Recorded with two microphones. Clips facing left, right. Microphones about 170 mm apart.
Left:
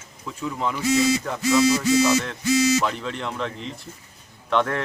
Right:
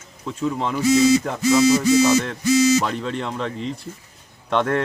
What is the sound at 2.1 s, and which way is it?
Speech, 45° right (ahead or behind).